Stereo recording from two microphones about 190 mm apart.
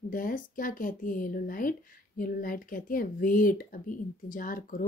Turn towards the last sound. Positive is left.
turn(degrees=45)  # may be behind; listen again after turning